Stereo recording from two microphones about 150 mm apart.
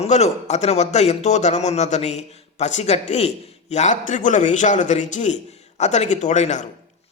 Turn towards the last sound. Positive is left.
turn(degrees=50)  # may be behind; listen again after turning